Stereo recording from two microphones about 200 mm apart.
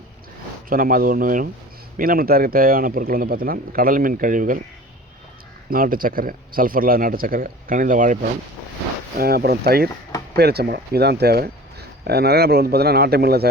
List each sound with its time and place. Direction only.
0.7 s speech: 45° right (ahead or behind)
5.7 s speech: 45° right (ahead or behind)